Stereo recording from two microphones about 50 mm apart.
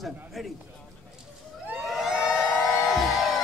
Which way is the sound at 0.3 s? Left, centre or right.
Centre.